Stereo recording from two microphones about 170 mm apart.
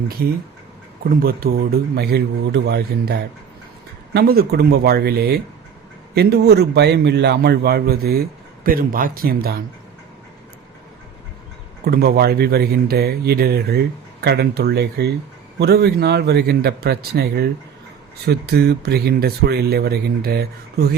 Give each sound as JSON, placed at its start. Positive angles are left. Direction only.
{"t": 0.2, "sound": "speech", "side_deg": -60}
{"t": 11.9, "sound": "speech", "side_deg": -70}